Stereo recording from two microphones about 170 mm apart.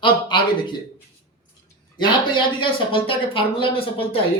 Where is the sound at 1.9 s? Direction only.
30° left (ahead or behind).